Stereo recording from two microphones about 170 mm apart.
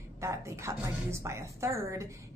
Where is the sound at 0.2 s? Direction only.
15° right (ahead or behind).